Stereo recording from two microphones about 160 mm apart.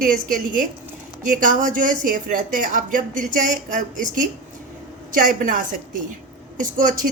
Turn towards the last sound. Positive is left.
turn(degrees=-55)  # may be behind; listen again after turning